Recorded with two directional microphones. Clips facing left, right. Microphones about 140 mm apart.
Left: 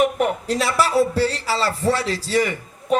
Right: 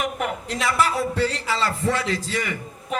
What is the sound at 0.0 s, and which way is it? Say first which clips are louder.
Speech: left 7 dB; 35° left (ahead or behind).